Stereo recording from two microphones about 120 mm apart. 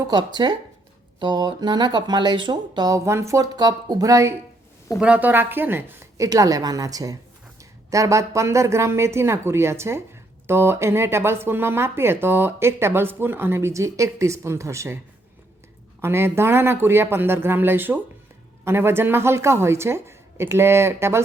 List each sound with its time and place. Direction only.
0.1 s speech: 40° right (ahead or behind)
4.9 s a woman's voice: 10° right (ahead or behind)
6.2 s speech: 30° right (ahead or behind)